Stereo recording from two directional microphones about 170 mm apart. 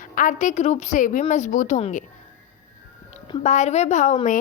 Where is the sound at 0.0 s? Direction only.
50° left (ahead or behind).